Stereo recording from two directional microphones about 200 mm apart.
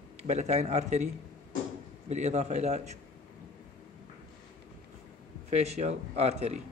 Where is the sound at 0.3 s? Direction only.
35° right (ahead or behind).